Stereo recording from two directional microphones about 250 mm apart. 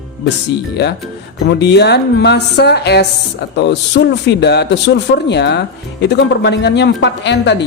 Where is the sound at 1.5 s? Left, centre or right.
Left.